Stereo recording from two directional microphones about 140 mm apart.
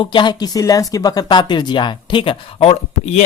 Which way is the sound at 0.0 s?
35° left (ahead or behind).